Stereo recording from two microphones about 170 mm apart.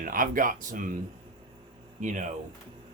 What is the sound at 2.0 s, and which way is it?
Speech, 45° right (ahead or behind).